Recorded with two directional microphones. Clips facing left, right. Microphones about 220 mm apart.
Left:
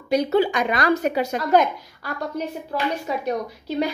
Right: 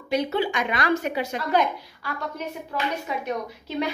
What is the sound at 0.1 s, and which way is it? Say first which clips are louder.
A woman's voice: left 5 dB; 40° left (ahead or behind).